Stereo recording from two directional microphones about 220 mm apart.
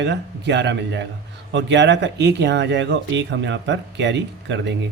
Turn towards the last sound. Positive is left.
turn(degrees=-55)  # may be behind; listen again after turning